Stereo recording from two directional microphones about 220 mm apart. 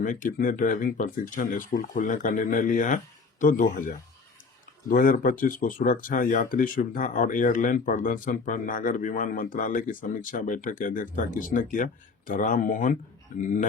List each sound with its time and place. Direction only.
0.0 s speech: 35° left (ahead or behind)